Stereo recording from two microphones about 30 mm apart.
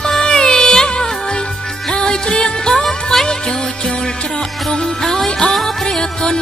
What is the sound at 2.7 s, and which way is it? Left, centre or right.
Music, centre.